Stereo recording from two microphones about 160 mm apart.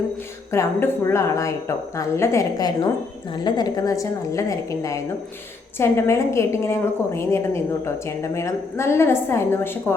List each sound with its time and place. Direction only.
0.5 s a woman's voice: 15° left (ahead or behind)